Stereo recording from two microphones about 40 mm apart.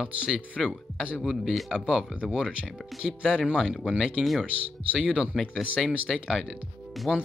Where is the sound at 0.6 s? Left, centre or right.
Centre.